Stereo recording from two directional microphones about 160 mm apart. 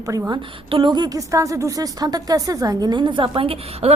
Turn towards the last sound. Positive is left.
turn(degrees=-35)  # may be behind; listen again after turning